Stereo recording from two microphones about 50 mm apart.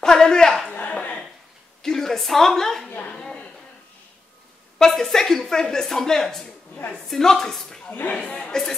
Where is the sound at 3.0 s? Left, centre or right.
Centre.